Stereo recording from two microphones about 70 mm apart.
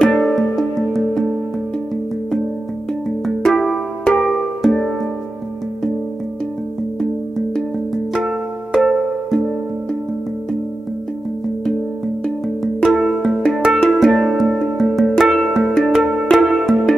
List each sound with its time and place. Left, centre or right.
0.0 s music: centre
3.3 s music: centre
7.0 s music: centre
8.1 s music: centre
12.9 s music: centre